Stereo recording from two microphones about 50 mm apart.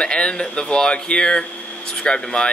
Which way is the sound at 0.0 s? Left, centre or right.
Centre.